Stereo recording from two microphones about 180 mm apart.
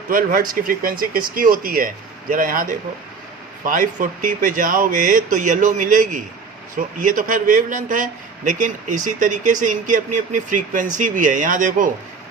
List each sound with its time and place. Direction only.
0.1 s a man's voice: 50° right (ahead or behind)